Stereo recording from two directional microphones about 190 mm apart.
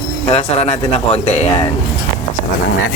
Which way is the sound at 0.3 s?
35° left (ahead or behind).